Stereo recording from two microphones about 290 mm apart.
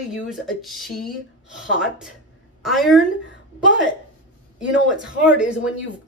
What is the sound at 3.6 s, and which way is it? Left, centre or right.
Speech, right.